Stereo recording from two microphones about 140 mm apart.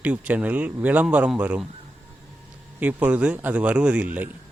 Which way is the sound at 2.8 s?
10° right (ahead or behind).